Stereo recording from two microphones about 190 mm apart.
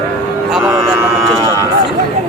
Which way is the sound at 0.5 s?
10° right (ahead or behind).